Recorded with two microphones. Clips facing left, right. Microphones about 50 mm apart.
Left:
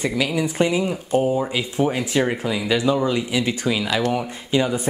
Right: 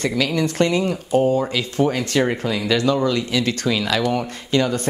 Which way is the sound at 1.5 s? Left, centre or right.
Centre.